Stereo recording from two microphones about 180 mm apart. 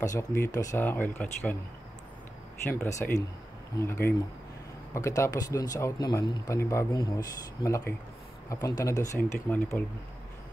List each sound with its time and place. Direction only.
0.0 s speech: 20° left (ahead or behind)
2.7 s speech: 15° left (ahead or behind)